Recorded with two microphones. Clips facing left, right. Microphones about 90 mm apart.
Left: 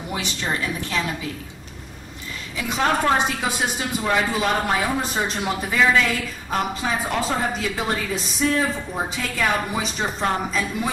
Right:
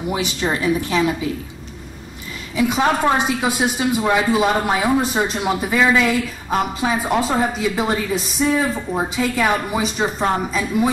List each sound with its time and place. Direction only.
0.1 s a man's voice: 10° right (ahead or behind)
2.5 s a man's voice: 5° right (ahead or behind)